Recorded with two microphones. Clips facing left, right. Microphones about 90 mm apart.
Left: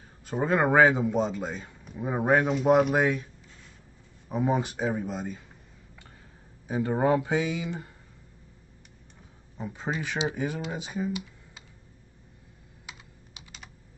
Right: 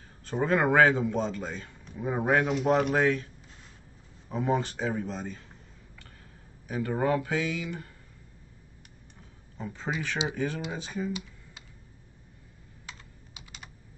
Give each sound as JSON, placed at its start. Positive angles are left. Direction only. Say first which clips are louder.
{"t": 0.2, "sound": "a man's voice", "louder": "left 1 dB", "side_deg": 10}
{"t": 2.4, "sound": "a man's voice", "louder": "left 3 dB", "side_deg": 5}
{"t": 4.3, "sound": "a man's voice", "louder": "left 1 dB", "side_deg": 15}
{"t": 6.7, "sound": "speech", "louder": "left 3 dB", "side_deg": 20}
{"t": 9.6, "sound": "a man's voice", "louder": "left 1 dB", "side_deg": 15}